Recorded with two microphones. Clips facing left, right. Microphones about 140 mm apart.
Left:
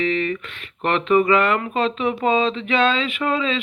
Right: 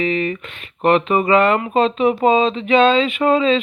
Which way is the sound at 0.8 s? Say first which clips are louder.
Right 2 dB; 15° right (ahead or behind).